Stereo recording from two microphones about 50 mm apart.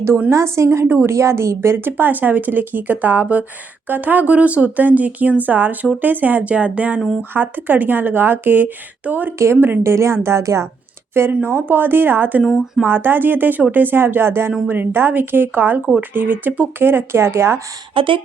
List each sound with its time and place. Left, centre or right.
0.3 s a woman's voice: right
7.3 s speech: right
9.8 s a woman's voice: right
11.1 s speech: right
12.4 s speech: centre
12.9 s speech: right
16.8 s speech: right